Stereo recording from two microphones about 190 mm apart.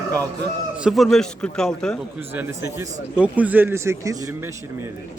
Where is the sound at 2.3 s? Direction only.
15° right (ahead or behind).